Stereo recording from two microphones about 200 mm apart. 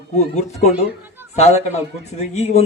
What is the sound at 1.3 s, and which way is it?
Speech, 30° left (ahead or behind).